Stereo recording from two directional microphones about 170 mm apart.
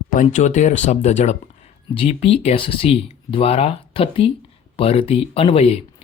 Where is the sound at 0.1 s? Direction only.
50° left (ahead or behind).